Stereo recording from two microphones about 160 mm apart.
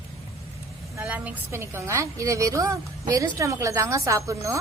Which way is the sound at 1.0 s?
10° right (ahead or behind).